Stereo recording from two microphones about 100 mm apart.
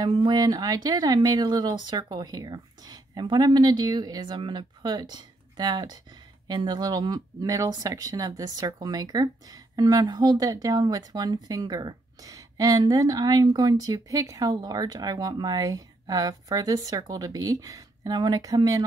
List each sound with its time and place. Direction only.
0.1 s speech: 50° right (ahead or behind)